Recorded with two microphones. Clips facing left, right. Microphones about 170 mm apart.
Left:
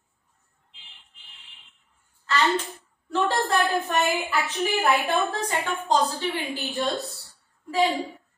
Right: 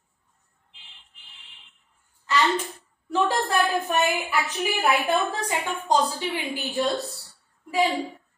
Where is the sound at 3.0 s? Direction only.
15° right (ahead or behind).